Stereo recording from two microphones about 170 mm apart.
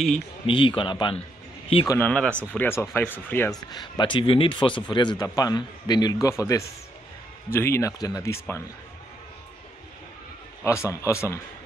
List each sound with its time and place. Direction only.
0.5 s a man's voice: 30° left (ahead or behind)
1.9 s speech: 10° left (ahead or behind)
4.0 s a man's voice: 30° left (ahead or behind)
10.6 s speech: 15° left (ahead or behind)